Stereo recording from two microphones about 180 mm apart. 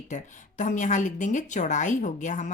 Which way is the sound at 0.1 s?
45° left (ahead or behind).